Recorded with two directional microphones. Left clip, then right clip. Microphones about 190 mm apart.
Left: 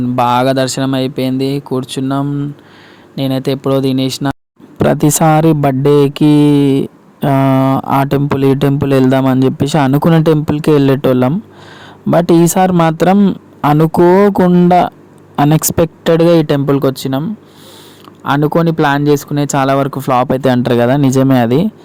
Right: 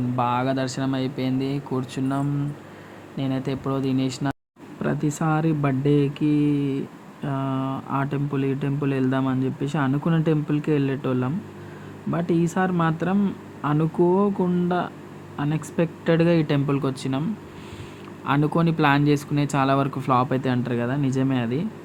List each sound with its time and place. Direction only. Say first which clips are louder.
0.2 s speech: left 13 dB; 45° left (ahead or behind)
4.8 s speech: left 15 dB; 55° left (ahead or behind); by 17.2 s 35° left (ahead or behind)
18.3 s speech: left 11 dB; 30° left (ahead or behind); by 21.7 s 55° left (ahead or behind)